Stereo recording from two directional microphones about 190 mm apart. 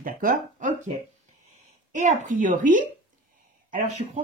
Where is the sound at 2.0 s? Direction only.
40° right (ahead or behind).